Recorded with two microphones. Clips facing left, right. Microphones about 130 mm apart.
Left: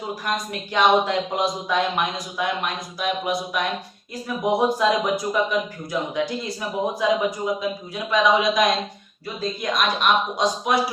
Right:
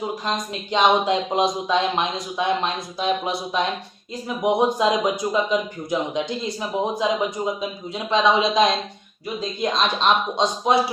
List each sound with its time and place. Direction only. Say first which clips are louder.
0.3 s a man's voice: right 1 dB; 20° right (ahead or behind)